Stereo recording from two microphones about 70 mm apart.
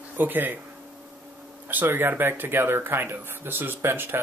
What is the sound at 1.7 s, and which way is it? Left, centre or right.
Speech, right.